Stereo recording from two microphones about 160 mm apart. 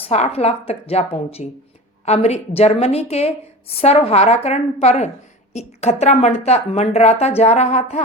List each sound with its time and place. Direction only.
0.1 s a woman's voice: 40° left (ahead or behind)